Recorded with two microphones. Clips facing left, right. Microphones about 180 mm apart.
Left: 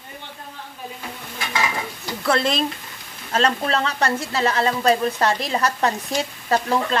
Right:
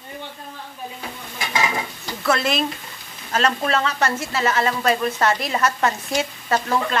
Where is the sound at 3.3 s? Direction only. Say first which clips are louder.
Even; 30° left (ahead or behind).